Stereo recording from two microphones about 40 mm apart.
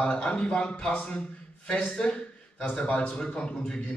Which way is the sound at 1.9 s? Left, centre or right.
Left.